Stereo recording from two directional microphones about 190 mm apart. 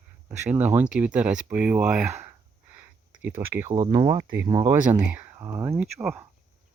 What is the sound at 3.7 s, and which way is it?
Speech, 25° right (ahead or behind).